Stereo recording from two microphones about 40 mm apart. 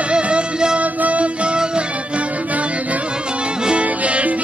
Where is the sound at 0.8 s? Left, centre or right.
Right.